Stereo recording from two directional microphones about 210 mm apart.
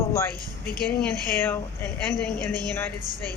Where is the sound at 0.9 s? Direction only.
10° left (ahead or behind).